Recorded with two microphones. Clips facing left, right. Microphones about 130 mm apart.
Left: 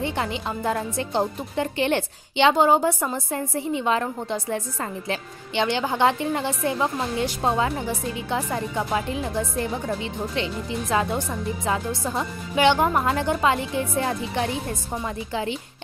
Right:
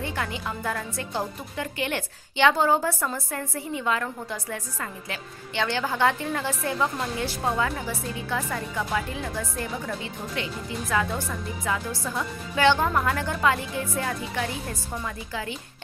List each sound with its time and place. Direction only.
0.0 s a woman's voice: 25° left (ahead or behind)